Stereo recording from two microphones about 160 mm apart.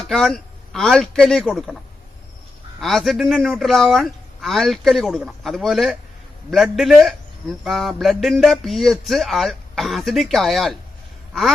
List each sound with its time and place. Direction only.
0.0 s speech: centre (ahead or behind)
2.8 s a man's voice: centre (ahead or behind)